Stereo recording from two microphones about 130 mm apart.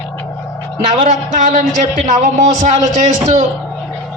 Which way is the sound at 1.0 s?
70° right (ahead or behind).